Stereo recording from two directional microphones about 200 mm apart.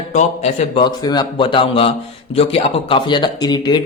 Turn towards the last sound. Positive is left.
turn(degrees=20)  # may be behind; listen again after turning